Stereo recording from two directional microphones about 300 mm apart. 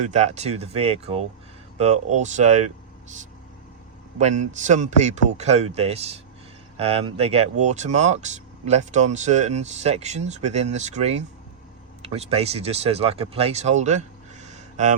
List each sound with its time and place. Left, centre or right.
0.0 s speech: right
4.2 s speech: right